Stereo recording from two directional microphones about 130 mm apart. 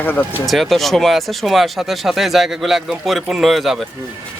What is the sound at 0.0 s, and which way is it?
Speech, 15° left (ahead or behind).